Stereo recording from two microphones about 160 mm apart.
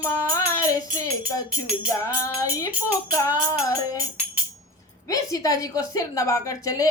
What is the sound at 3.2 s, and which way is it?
Speech, 20° left (ahead or behind).